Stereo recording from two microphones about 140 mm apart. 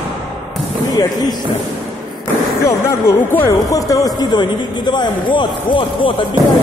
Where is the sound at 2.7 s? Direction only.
20° left (ahead or behind); by 6.3 s 35° left (ahead or behind).